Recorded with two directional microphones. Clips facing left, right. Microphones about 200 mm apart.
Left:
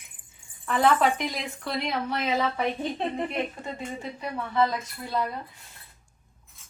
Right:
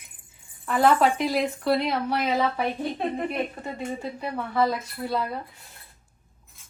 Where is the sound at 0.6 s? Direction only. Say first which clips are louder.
Right 2 dB; 5° right (ahead or behind).